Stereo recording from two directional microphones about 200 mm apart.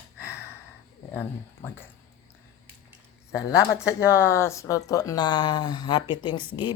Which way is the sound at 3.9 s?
15° left (ahead or behind).